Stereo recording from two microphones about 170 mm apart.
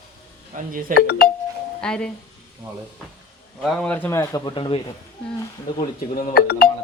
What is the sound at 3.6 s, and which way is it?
A man's voice, 5° left (ahead or behind).